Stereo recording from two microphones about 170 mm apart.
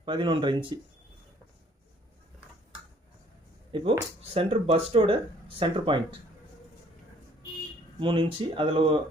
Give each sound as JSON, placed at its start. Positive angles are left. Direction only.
{"t": 0.0, "sound": "speech", "side_deg": -30}
{"t": 3.7, "sound": "speech", "side_deg": -30}
{"t": 7.9, "sound": "speech", "side_deg": -30}